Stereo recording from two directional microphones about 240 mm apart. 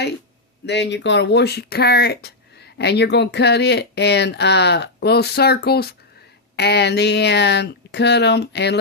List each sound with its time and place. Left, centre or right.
0.6 s speech: left